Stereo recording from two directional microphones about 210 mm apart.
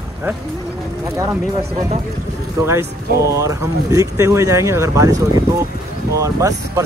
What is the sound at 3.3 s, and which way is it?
Speech, 15° right (ahead or behind).